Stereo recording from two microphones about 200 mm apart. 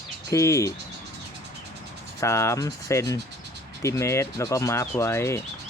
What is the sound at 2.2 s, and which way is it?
A man's voice, 15° left (ahead or behind).